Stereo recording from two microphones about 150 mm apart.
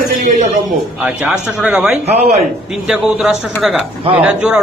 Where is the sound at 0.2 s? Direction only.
60° right (ahead or behind).